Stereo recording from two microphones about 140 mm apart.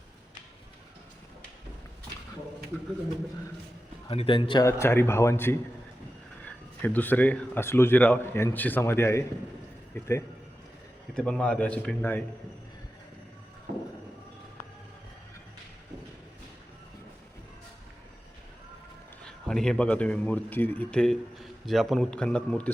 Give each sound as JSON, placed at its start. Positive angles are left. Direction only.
{"t": 4.1, "sound": "a man's voice", "side_deg": 40}
{"t": 4.6, "sound": "speech", "side_deg": 15}
{"t": 11.1, "sound": "speech", "side_deg": 5}
{"t": 19.2, "sound": "speech", "side_deg": 5}